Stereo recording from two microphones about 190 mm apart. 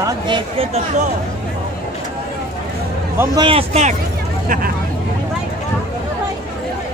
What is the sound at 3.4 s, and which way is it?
Speech, 30° right (ahead or behind).